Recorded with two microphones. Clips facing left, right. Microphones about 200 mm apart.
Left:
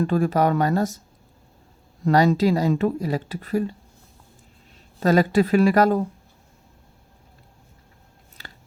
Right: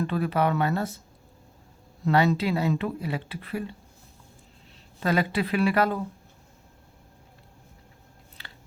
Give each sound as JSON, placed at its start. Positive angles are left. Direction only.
{"t": 0.0, "sound": "speech", "side_deg": 45}
{"t": 2.0, "sound": "a woman's voice", "side_deg": 45}
{"t": 4.9, "sound": "speech", "side_deg": 40}
{"t": 8.4, "sound": "scissors", "side_deg": 40}